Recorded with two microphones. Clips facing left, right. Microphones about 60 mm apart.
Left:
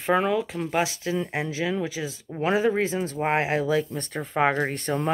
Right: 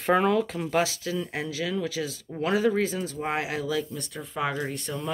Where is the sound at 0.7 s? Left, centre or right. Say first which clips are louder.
Left 1 dB; left.